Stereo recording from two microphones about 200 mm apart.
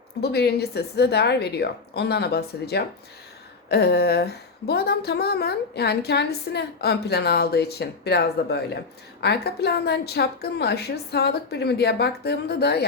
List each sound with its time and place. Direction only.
0.2 s a woman's voice: 55° left (ahead or behind)